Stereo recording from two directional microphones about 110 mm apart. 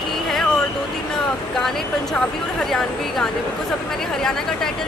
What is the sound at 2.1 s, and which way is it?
Speech, 5° left (ahead or behind).